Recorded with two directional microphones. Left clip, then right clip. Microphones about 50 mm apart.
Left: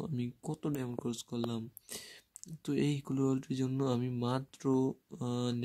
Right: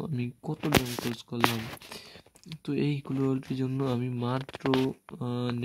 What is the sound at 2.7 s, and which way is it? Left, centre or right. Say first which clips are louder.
Speech: right 3 dB; left.